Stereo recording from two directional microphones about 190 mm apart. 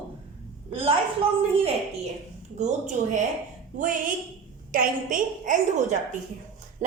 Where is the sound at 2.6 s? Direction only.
40° right (ahead or behind).